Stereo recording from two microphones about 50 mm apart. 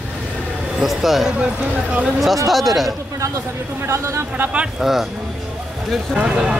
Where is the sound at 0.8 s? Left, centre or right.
Centre.